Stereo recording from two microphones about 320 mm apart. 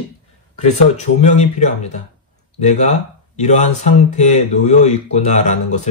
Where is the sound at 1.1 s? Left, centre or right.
Left.